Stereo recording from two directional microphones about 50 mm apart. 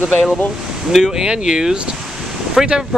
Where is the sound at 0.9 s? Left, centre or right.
Centre.